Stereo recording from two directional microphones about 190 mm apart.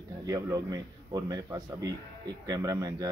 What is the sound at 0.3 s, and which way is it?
A man's voice, 20° right (ahead or behind).